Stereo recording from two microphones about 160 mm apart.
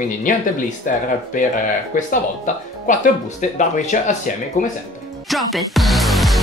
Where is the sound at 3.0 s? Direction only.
50° left (ahead or behind).